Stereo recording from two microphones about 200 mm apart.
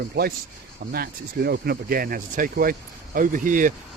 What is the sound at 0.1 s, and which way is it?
Speech, 50° right (ahead or behind).